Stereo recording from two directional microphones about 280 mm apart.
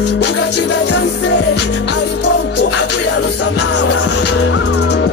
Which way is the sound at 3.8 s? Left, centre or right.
Left.